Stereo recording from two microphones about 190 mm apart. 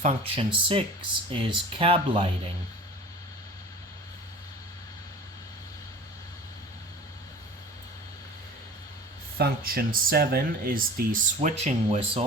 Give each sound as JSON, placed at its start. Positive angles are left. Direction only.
{"t": 0.0, "sound": "speech", "side_deg": -30}
{"t": 9.4, "sound": "speech", "side_deg": -55}
{"t": 11.4, "sound": "speech", "side_deg": -35}